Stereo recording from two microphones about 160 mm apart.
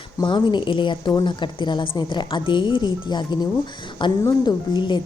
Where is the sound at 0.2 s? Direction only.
30° left (ahead or behind).